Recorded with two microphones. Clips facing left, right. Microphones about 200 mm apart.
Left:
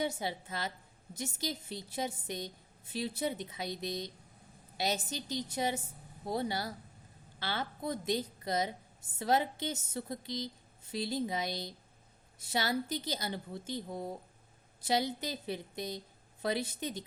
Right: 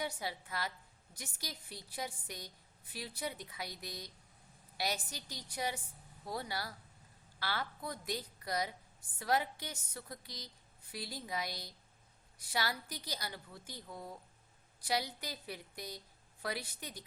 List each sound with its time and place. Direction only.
0.0 s a woman's voice: 25° left (ahead or behind)